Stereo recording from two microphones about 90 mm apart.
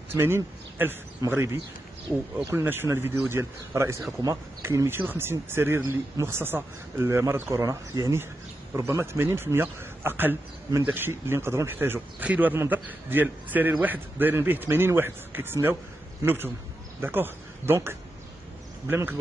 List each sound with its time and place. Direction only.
0.1 s speech: 25° right (ahead or behind)
18.9 s speech: 20° right (ahead or behind)